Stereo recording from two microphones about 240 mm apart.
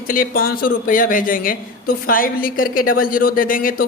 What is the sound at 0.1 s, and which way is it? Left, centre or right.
Speech, left.